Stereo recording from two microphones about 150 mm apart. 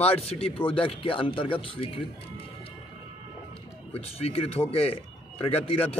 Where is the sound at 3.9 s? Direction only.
40° left (ahead or behind).